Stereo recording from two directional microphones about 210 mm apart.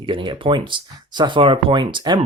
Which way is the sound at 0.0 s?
25° right (ahead or behind).